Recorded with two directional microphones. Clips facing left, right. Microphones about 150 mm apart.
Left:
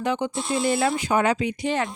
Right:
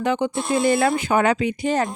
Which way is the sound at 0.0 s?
60° right (ahead or behind).